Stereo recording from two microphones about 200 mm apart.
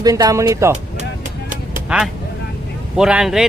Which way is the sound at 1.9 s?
5° right (ahead or behind).